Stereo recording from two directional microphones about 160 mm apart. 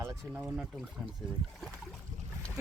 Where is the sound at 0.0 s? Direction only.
15° right (ahead or behind).